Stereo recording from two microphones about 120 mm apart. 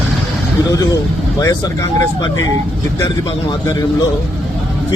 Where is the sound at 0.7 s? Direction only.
30° left (ahead or behind).